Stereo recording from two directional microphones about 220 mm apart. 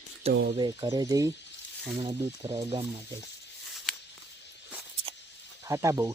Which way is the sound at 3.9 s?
Centre (ahead or behind).